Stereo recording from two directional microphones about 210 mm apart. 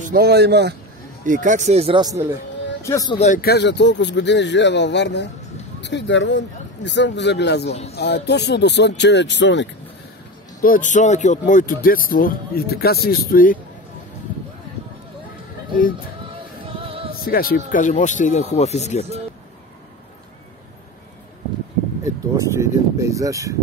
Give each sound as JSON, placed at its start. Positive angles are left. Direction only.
{"t": 0.1, "sound": "speech", "side_deg": -50}
{"t": 1.2, "sound": "speech", "side_deg": -35}
{"t": 2.8, "sound": "speech", "side_deg": 15}
{"t": 3.2, "sound": "speech", "side_deg": 40}
{"t": 10.6, "sound": "speech", "side_deg": 40}
{"t": 16.6, "sound": "music", "side_deg": -25}
{"t": 17.1, "sound": "speech", "side_deg": 45}
{"t": 22.0, "sound": "a sound", "side_deg": -15}